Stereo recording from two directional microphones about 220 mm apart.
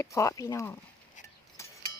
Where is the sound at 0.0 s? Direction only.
15° left (ahead or behind).